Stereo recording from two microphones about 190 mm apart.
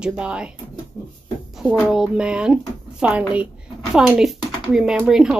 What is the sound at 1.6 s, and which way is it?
A woman's voice, 5° right (ahead or behind).